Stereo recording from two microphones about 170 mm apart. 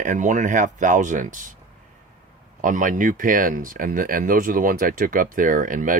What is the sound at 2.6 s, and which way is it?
Speech, 50° right (ahead or behind).